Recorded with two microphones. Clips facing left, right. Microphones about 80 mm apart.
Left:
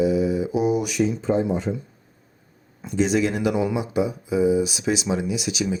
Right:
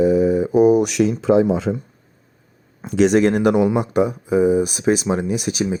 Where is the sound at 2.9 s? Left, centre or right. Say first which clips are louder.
Right 6 dB; right.